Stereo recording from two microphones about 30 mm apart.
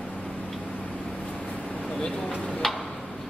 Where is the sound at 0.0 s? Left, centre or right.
Left.